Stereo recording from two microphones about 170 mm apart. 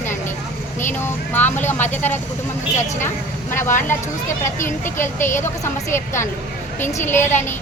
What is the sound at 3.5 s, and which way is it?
A woman's voice, 15° left (ahead or behind).